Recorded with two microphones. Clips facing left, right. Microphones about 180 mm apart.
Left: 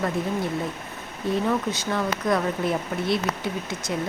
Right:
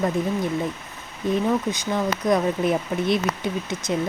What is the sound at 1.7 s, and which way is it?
Speech, 15° right (ahead or behind).